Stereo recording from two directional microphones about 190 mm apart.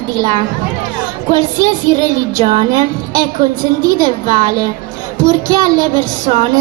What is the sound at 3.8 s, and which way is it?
A woman's voice, 20° right (ahead or behind).